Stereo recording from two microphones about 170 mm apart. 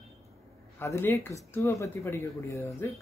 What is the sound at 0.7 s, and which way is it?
Speech, 15° left (ahead or behind).